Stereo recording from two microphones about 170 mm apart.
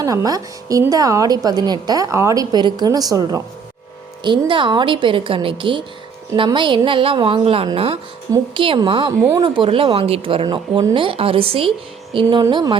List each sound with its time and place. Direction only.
0.0 s a woman's voice: 20° right (ahead or behind)